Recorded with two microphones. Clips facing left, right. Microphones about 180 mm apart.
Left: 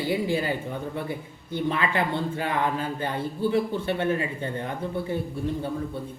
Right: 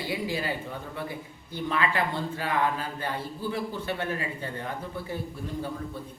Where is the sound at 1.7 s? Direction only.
25° left (ahead or behind).